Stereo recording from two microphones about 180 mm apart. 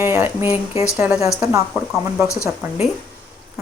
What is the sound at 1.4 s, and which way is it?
Speech, 15° right (ahead or behind).